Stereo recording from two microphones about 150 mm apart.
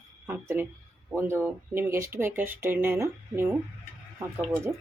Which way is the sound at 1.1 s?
15° right (ahead or behind).